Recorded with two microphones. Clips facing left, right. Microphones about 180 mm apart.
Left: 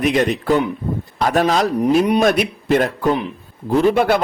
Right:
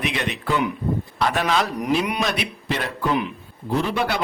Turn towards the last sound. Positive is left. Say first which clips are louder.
# left 8 dB
turn(degrees=50)  # may be behind; listen again after turning